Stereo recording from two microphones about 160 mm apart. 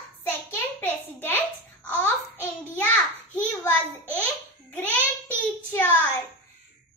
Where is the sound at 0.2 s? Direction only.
15° left (ahead or behind).